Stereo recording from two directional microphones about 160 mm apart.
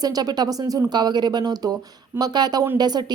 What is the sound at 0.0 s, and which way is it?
A woman's voice, 25° right (ahead or behind).